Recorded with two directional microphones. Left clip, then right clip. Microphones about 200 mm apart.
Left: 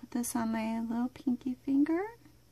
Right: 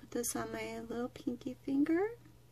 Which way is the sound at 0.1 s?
40° left (ahead or behind).